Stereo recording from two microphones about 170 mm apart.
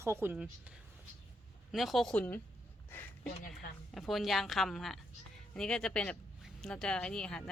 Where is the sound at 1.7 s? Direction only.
Centre (ahead or behind).